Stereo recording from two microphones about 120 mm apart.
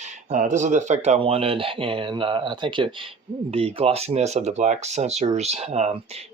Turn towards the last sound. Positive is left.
turn(degrees=-65)  # may be behind; listen again after turning